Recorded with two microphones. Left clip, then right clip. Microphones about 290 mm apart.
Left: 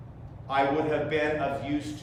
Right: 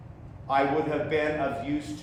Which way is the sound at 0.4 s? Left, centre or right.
Centre.